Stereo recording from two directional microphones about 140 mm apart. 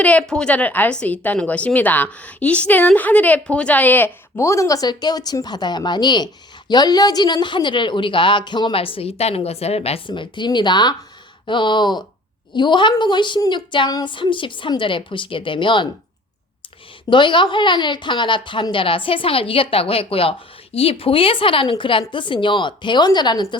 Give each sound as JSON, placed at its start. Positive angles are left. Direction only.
{"t": 0.0, "sound": "a woman's voice", "side_deg": 10}
{"t": 17.1, "sound": "speech", "side_deg": 35}